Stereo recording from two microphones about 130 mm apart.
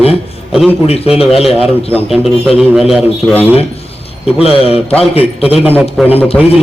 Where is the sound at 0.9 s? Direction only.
50° left (ahead or behind).